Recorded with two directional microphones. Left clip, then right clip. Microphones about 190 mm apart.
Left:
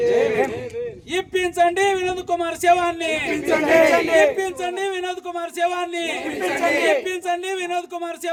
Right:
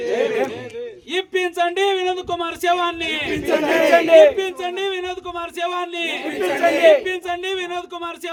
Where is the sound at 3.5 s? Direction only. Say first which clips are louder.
Left 2 dB; 20° right (ahead or behind).